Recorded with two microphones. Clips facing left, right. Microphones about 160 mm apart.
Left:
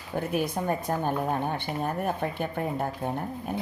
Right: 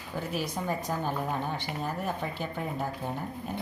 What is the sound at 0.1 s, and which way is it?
Speech, 55° left (ahead or behind).